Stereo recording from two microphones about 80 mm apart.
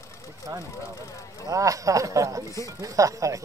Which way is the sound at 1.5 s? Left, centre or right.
Right.